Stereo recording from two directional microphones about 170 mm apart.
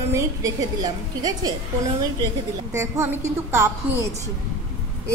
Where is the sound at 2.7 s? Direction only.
15° right (ahead or behind).